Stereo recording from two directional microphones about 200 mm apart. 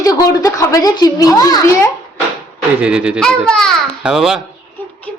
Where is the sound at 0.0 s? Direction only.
20° left (ahead or behind).